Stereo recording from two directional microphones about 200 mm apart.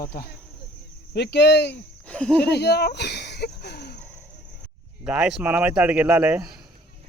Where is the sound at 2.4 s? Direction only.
55° left (ahead or behind).